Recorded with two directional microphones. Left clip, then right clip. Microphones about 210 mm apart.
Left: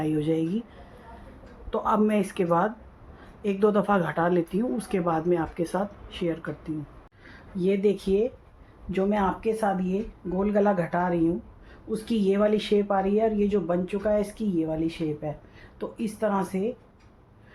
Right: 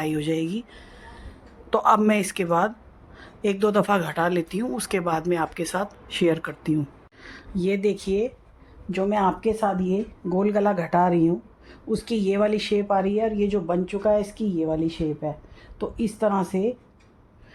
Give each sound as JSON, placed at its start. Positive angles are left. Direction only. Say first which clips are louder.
{"t": 0.0, "sound": "speech", "louder": "right 1 dB", "side_deg": -55}